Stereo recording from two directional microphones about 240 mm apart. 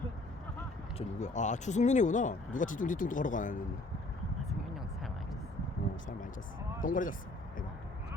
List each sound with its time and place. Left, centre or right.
0.9 s speech: left
6.8 s speech: left